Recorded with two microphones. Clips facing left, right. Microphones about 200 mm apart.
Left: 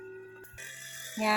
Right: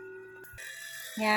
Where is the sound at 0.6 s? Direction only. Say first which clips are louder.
Left 1 dB; 50° left (ahead or behind).